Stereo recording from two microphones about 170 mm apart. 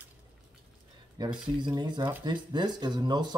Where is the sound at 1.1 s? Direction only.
25° right (ahead or behind).